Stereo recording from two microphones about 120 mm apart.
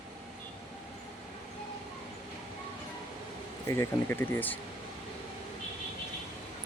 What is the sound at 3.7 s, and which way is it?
Speech, 20° left (ahead or behind).